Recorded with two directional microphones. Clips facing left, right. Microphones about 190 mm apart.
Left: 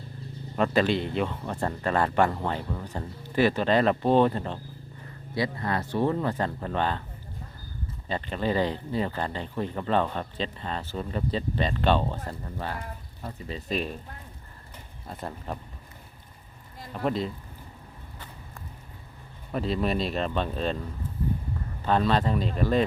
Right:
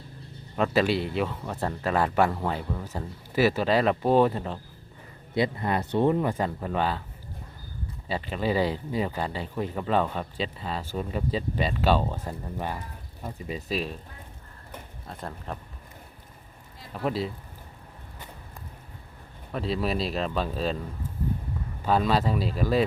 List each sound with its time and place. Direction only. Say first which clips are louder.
0.5 s speech: even; 5° right (ahead or behind)
5.3 s speech: right 3 dB; 20° right (ahead or behind)
8.0 s speech: even; 5° right (ahead or behind)
15.1 s speech: left 1 dB; centre (ahead or behind)
16.9 s speech: left 1 dB; 5° right (ahead or behind)
19.5 s speech: left 1 dB; centre (ahead or behind)
21.8 s speech: even; 5° right (ahead or behind)